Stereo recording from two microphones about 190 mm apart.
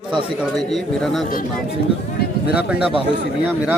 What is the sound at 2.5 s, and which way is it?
Speech, 5° right (ahead or behind).